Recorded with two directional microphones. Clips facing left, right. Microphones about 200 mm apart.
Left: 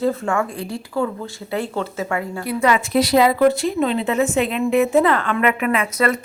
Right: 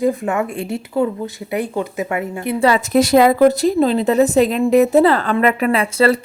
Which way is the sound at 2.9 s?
50° right (ahead or behind).